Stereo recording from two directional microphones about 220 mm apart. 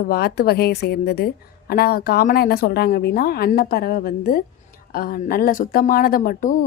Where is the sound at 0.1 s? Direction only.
45° left (ahead or behind).